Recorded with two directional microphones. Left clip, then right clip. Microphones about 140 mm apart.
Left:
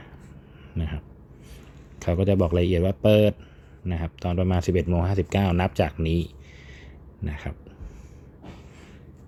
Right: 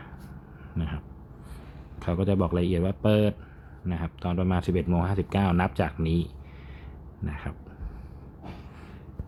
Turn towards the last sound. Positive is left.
turn(degrees=30)  # may be behind; listen again after turning